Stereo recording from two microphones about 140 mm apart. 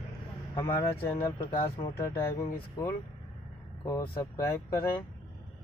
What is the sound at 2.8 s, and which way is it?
Speech, 25° left (ahead or behind).